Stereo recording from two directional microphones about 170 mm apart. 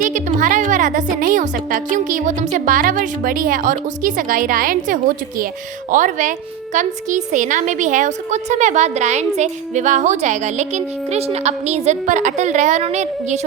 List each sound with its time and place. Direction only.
0.3 s a woman's voice: 50° right (ahead or behind)